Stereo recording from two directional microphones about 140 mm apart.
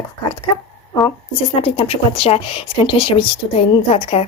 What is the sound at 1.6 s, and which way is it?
Speech, 45° left (ahead or behind).